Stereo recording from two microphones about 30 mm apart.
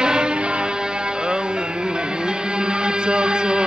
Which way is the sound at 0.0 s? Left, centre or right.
Right.